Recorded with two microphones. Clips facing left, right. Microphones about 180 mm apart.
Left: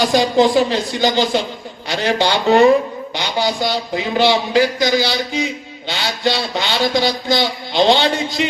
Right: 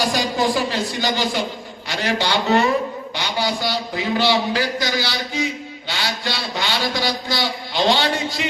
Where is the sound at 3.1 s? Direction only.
20° left (ahead or behind).